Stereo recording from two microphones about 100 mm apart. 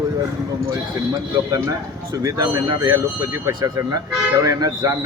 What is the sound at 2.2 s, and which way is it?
Speech, 35° right (ahead or behind).